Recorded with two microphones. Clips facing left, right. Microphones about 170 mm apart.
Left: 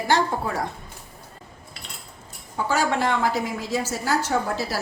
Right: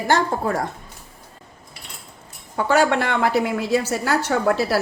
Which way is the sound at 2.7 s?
65° right (ahead or behind).